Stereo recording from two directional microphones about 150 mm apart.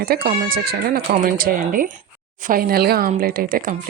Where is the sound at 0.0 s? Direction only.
75° right (ahead or behind).